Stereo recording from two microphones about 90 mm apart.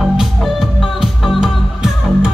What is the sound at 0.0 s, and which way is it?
Music, 5° right (ahead or behind).